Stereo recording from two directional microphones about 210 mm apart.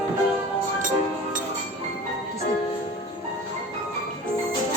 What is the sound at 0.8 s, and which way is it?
Music, 40° right (ahead or behind).